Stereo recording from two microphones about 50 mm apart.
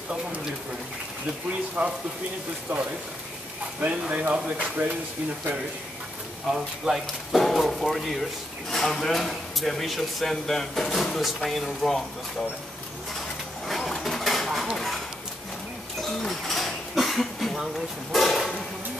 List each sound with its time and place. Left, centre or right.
1.8 s speech: right
3.8 s speech: right
6.5 s speech: centre
7.3 s speech: centre
13.7 s a sound: centre
16.0 s dishes: centre
18.1 s a sound: centre